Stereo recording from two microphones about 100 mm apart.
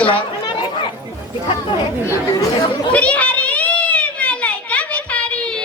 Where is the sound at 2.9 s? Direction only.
15° left (ahead or behind).